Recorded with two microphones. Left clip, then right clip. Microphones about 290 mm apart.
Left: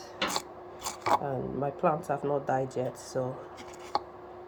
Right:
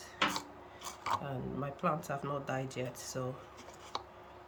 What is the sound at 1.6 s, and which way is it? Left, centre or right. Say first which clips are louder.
A woman's voice: left 7 dB; centre.